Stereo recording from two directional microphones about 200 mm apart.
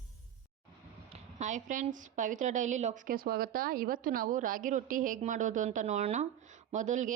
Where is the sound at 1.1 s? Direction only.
40° right (ahead or behind).